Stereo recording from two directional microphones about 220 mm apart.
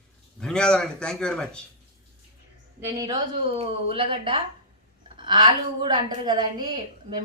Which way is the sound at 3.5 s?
25° right (ahead or behind).